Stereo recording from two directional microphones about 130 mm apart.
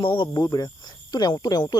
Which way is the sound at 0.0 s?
35° left (ahead or behind).